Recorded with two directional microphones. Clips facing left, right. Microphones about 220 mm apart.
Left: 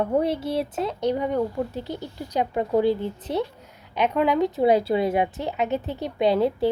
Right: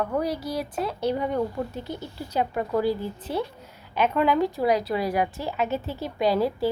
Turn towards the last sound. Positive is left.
turn(degrees=25)  # may be behind; listen again after turning